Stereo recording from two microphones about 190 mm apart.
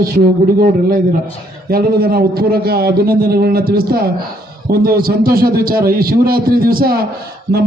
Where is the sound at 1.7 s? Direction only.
55° right (ahead or behind).